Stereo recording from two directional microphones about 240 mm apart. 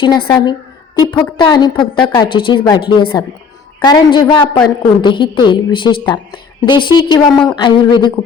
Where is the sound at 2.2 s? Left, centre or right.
Centre.